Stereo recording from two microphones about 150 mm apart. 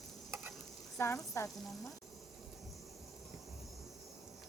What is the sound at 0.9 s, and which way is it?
Speech, 20° left (ahead or behind).